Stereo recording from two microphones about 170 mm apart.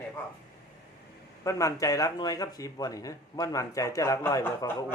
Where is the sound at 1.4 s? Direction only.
20° left (ahead or behind).